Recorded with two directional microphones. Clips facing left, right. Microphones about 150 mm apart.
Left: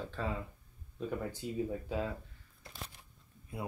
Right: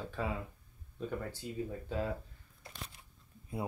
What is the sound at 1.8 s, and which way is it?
Speech, 5° left (ahead or behind).